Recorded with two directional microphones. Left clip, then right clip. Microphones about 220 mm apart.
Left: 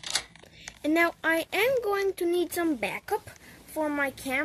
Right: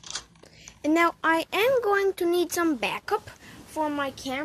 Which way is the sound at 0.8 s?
5° right (ahead or behind).